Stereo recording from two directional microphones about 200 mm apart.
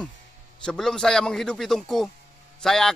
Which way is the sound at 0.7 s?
5° left (ahead or behind).